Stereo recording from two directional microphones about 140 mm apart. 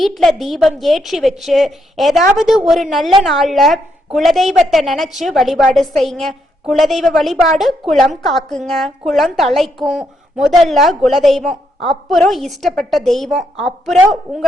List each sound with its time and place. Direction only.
0.0 s a woman's voice: centre (ahead or behind)